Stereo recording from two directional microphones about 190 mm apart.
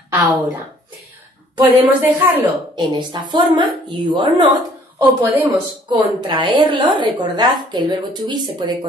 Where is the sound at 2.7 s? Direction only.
25° right (ahead or behind).